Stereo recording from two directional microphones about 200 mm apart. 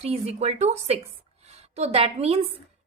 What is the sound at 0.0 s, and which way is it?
A woman's voice, 30° right (ahead or behind).